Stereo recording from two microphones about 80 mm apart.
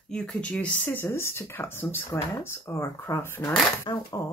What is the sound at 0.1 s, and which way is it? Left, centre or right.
Speech, centre.